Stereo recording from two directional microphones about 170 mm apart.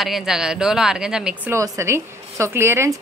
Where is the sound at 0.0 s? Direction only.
Centre (ahead or behind).